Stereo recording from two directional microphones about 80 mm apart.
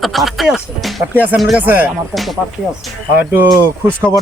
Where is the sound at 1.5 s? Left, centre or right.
Right.